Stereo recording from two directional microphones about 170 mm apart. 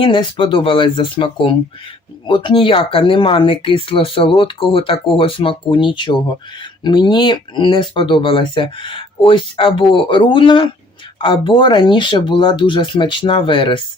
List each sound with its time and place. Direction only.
0.0 s speech: 30° left (ahead or behind)